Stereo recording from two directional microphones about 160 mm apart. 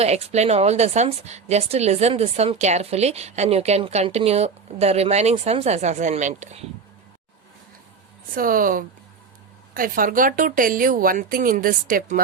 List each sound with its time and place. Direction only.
0.0 s a woman's voice: 40° right (ahead or behind)
8.4 s a woman's voice: 60° right (ahead or behind)